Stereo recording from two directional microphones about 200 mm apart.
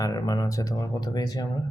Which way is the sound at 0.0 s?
20° left (ahead or behind).